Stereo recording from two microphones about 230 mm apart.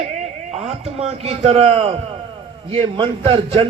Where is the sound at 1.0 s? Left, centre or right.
Right.